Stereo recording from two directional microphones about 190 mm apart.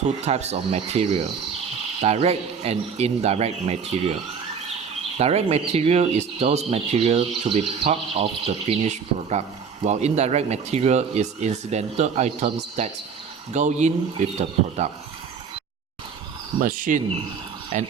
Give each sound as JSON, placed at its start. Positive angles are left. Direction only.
{"t": 0.3, "sound": "speech", "side_deg": -35}
{"t": 16.6, "sound": "speech", "side_deg": -45}